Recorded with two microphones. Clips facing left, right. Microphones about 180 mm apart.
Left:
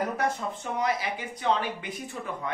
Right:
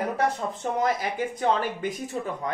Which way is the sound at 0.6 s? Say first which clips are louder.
Right 3 dB; 40° right (ahead or behind).